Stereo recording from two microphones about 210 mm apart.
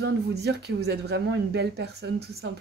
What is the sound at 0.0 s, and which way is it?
Speech, 50° right (ahead or behind).